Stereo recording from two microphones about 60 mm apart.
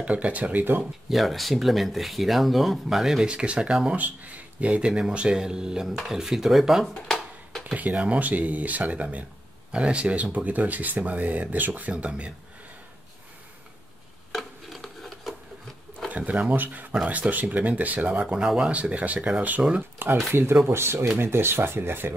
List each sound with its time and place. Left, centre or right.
0.0 s speech: right
1.0 s speech: centre
3.9 s speech: right; by 6.9 s centre
6.9 s a sound: centre
7.6 s speech: right
14.3 s a sound: centre
16.1 s speech: right
18.2 s speech: centre
20.0 s speech: right